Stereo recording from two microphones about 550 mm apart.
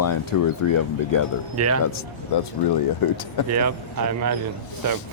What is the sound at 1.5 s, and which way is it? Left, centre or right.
Speech, right.